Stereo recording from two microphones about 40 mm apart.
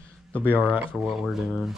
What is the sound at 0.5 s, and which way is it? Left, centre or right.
Speech, right.